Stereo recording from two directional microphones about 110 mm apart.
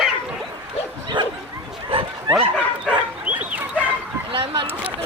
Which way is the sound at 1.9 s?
55° right (ahead or behind).